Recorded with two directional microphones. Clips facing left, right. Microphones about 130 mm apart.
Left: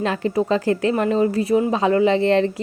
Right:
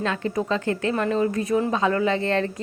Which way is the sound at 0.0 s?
30° left (ahead or behind).